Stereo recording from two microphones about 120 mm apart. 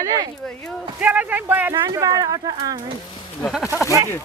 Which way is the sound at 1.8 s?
30° right (ahead or behind).